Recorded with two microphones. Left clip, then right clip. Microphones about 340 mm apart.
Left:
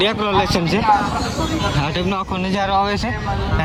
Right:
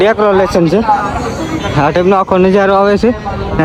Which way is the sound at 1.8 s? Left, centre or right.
Centre.